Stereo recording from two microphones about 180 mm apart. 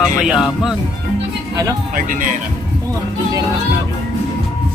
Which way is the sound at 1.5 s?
15° right (ahead or behind).